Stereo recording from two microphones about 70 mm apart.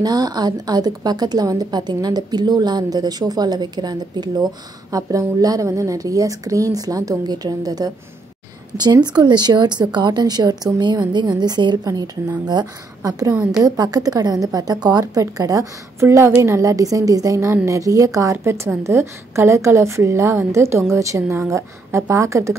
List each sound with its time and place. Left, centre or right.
0.0 s a woman's voice: right
4.9 s a woman's voice: right
8.7 s a woman's voice: right
11.8 s a woman's voice: right
16.0 s a woman's voice: right